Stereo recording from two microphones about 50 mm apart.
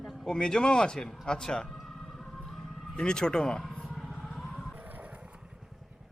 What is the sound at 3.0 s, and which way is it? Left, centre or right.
Speech, centre.